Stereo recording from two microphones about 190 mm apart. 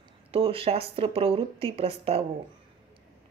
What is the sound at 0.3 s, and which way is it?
Speech, 30° right (ahead or behind).